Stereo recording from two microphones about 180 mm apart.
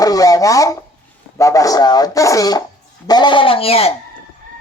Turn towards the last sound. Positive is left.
turn(degrees=35)  # may be behind; listen again after turning